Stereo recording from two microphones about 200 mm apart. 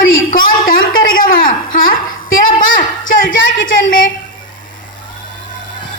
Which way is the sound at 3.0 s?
70° left (ahead or behind).